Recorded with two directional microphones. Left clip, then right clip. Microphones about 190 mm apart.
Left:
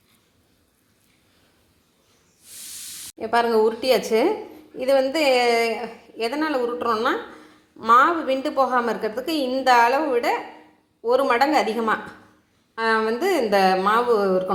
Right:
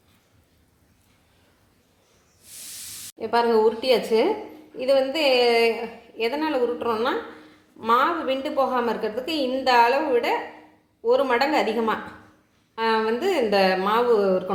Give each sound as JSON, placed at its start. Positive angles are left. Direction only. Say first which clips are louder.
{"t": 3.2, "sound": "a woman's voice", "louder": "left 1 dB", "side_deg": 35}